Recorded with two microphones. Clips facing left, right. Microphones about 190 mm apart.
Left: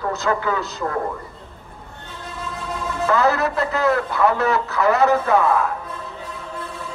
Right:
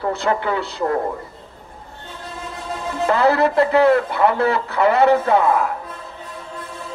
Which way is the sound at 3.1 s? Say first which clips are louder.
Right 3 dB; 30° right (ahead or behind).